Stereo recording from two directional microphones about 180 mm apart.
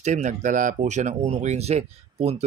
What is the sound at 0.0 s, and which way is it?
Speech, 40° right (ahead or behind).